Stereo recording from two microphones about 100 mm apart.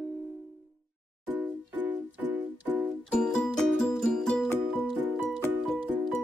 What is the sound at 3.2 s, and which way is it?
Music, 5° left (ahead or behind).